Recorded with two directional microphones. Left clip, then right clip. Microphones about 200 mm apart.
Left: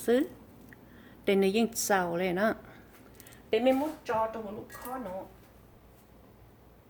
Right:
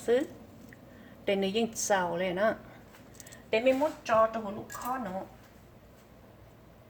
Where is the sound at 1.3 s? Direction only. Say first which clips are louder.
Left 3 dB; 45° left (ahead or behind).